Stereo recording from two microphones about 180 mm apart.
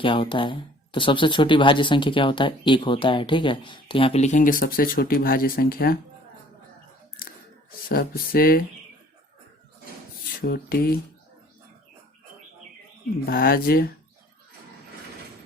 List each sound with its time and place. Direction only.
0.0 s speech: 30° left (ahead or behind); by 6.0 s 55° left (ahead or behind)
7.9 s speech: 55° left (ahead or behind)
10.4 s speech: 60° left (ahead or behind)
13.2 s speech: 55° left (ahead or behind)